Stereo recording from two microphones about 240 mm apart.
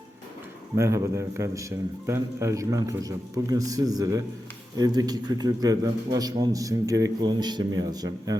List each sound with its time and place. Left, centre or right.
0.8 s a man's voice: centre